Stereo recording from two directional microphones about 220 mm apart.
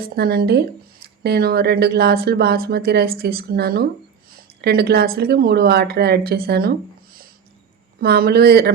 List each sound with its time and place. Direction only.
0.0 s speech: 45° right (ahead or behind)